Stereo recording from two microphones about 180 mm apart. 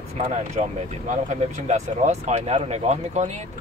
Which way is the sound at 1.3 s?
40° right (ahead or behind).